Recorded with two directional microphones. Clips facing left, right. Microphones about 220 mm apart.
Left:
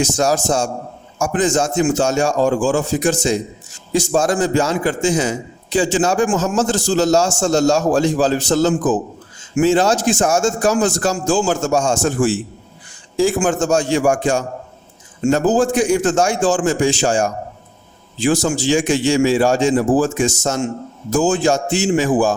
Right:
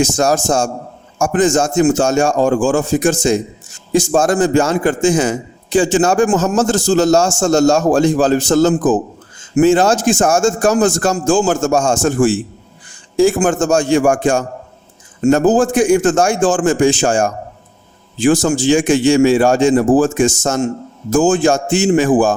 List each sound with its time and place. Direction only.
0.0 s a man's voice: 50° right (ahead or behind)